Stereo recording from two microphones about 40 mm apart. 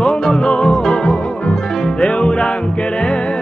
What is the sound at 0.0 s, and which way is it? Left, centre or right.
Music, centre.